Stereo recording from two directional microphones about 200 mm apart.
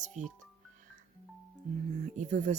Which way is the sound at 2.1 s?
35° right (ahead or behind).